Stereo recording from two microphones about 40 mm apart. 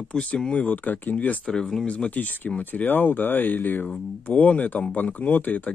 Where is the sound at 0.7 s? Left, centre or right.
Left.